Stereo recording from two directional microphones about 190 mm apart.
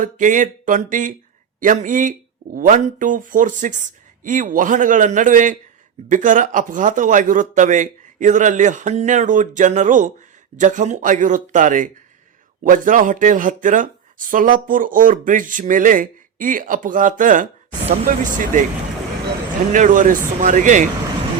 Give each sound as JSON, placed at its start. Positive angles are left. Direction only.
{"t": 0.0, "sound": "speech", "side_deg": -40}
{"t": 19.7, "sound": "speech", "side_deg": -45}